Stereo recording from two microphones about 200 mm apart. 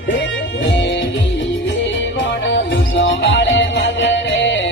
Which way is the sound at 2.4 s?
65° left (ahead or behind).